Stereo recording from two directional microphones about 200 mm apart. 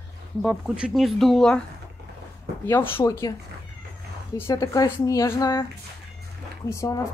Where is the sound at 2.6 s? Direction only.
10° left (ahead or behind).